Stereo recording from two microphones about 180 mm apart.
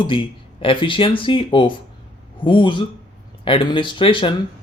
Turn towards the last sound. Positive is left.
turn(degrees=30)  # may be behind; listen again after turning